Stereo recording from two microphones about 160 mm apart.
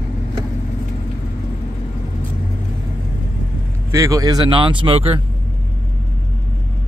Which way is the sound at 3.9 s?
20° right (ahead or behind).